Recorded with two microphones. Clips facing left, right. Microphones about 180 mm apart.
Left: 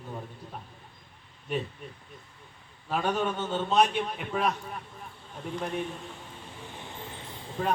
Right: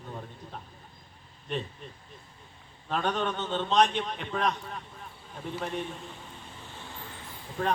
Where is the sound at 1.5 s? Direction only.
10° left (ahead or behind).